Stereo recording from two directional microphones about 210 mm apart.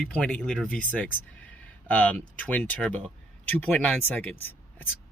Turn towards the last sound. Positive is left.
turn(degrees=10)  # may be behind; listen again after turning